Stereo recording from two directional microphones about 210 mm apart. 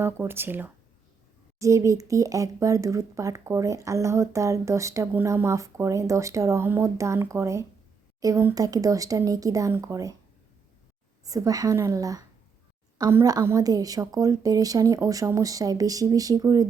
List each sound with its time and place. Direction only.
0.0 s speech: 10° right (ahead or behind)
11.3 s speech: 15° right (ahead or behind)